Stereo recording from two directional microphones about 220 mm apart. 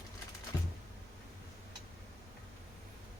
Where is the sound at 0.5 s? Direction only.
15° left (ahead or behind).